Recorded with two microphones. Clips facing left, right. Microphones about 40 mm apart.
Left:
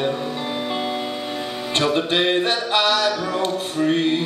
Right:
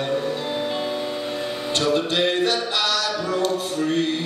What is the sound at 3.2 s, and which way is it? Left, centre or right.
Speech, left.